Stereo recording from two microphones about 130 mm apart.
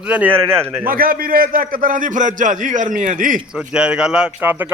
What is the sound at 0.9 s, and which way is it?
A man's voice, 90° right.